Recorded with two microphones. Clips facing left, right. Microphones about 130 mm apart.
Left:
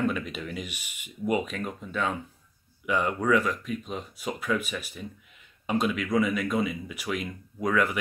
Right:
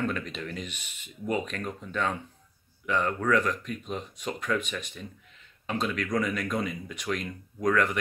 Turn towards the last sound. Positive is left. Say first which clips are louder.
# even
turn(degrees=5)  # may be behind; listen again after turning